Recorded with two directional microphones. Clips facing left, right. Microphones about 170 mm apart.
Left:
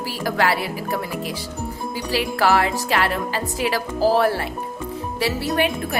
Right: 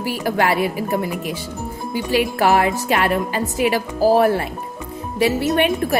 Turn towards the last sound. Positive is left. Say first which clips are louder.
# right 4 dB
turn(degrees=-25)  # may be behind; listen again after turning